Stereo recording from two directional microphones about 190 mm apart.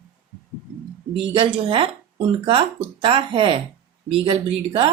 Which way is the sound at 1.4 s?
25° right (ahead or behind).